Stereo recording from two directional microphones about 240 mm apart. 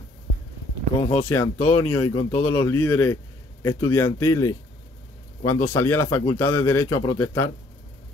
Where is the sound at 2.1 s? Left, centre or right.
Centre.